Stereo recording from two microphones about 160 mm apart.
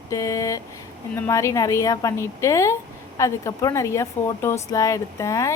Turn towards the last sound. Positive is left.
turn(degrees=20)  # may be behind; listen again after turning